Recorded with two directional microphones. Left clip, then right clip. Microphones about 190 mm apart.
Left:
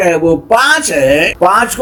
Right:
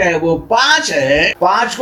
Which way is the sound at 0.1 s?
55° left (ahead or behind).